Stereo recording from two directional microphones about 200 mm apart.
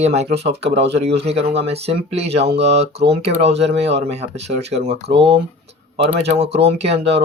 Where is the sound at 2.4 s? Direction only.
60° right (ahead or behind).